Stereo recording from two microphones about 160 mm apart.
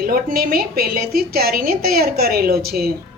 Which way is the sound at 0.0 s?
65° right (ahead or behind).